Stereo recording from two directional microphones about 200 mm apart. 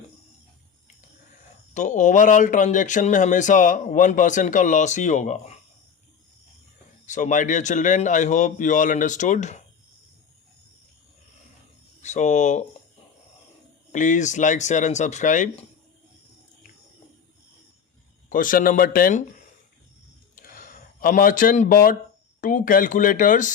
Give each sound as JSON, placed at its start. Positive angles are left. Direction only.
{"t": 1.7, "sound": "speech", "side_deg": 40}
{"t": 7.0, "sound": "speech", "side_deg": 40}
{"t": 12.0, "sound": "speech", "side_deg": 35}
{"t": 13.9, "sound": "speech", "side_deg": 40}
{"t": 18.3, "sound": "speech", "side_deg": 40}
{"t": 20.3, "sound": "a sound", "side_deg": 40}
{"t": 22.4, "sound": "speech", "side_deg": 40}